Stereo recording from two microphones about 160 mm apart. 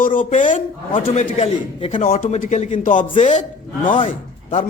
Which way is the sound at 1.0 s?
40° left (ahead or behind).